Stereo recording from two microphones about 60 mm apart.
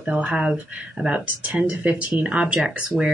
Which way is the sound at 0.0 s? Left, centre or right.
Right.